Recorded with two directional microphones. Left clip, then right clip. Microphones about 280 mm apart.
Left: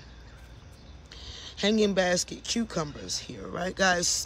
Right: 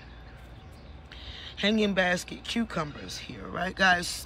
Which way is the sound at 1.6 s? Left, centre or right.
Centre.